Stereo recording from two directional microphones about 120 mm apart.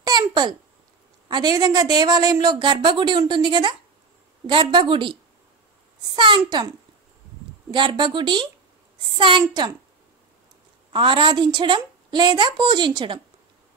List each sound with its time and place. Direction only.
0.0 s babbling: 35° right (ahead or behind)
1.3 s a woman's voice: 35° right (ahead or behind)
7.7 s a woman's voice: 40° right (ahead or behind)
10.9 s a woman's voice: 45° right (ahead or behind)